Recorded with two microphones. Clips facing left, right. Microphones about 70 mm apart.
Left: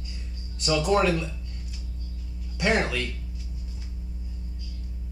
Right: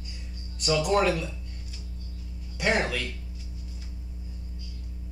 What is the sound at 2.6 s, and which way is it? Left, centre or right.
Speech, centre.